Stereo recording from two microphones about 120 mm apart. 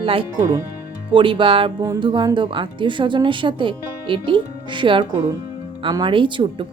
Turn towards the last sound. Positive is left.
turn(degrees=-40)  # may be behind; listen again after turning